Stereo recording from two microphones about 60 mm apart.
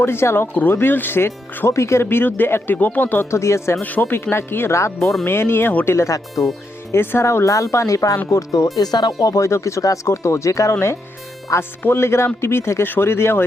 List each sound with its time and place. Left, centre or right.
0.0 s speech: left
2.0 s speech: left
3.2 s speech: left
3.8 s speech: left
4.0 s speech: left
4.9 s speech: centre
5.2 s speech: left
6.4 s speech: left
6.9 s speech: left
7.3 s speech: left
11.8 s speech: left